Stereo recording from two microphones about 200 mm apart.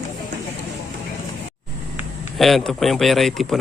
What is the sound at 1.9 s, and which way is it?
Speech, centre (ahead or behind).